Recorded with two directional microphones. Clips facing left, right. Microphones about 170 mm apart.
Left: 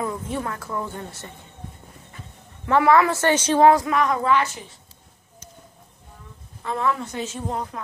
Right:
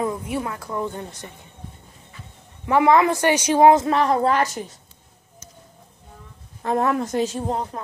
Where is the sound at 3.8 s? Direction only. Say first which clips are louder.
Right 2 dB; 35° right (ahead or behind).